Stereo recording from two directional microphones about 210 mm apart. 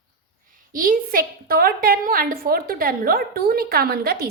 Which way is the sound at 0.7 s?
40° right (ahead or behind).